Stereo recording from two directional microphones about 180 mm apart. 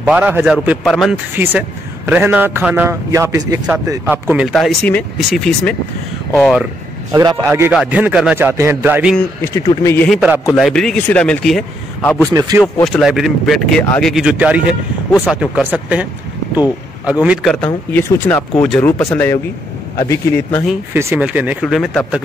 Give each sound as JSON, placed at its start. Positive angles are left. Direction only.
{"t": 0.0, "sound": "a man's voice", "side_deg": -10}
{"t": 1.3, "sound": "a man's voice", "side_deg": -10}
{"t": 7.1, "sound": "a man's voice", "side_deg": -20}
{"t": 9.4, "sound": "speech", "side_deg": 15}
{"t": 10.0, "sound": "speech", "side_deg": -5}
{"t": 12.3, "sound": "speech", "side_deg": -20}
{"t": 12.8, "sound": "a man's voice", "side_deg": 0}
{"t": 17.9, "sound": "speech", "side_deg": 10}
{"t": 20.9, "sound": "a man's voice", "side_deg": -15}